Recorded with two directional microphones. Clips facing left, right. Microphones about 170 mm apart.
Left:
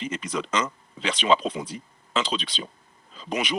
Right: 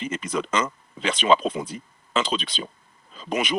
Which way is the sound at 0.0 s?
50° right (ahead or behind).